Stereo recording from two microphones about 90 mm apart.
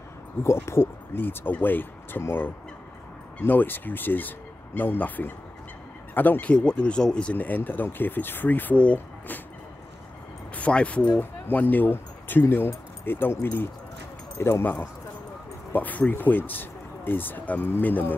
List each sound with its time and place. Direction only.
0.4 s speech: 30° left (ahead or behind)
10.5 s speech: 15° left (ahead or behind)